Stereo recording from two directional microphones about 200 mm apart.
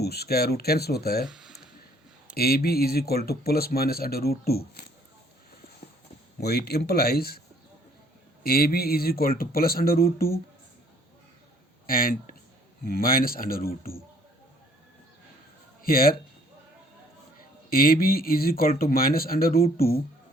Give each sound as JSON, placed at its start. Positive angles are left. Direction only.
{"t": 0.0, "sound": "speech", "side_deg": 50}
{"t": 1.3, "sound": "a sound", "side_deg": -5}
{"t": 2.3, "sound": "speech", "side_deg": 50}
{"t": 6.4, "sound": "speech", "side_deg": 55}
{"t": 8.4, "sound": "speech", "side_deg": 50}
{"t": 11.9, "sound": "speech", "side_deg": 45}
{"t": 15.8, "sound": "speech", "side_deg": 45}
{"t": 17.7, "sound": "speech", "side_deg": 45}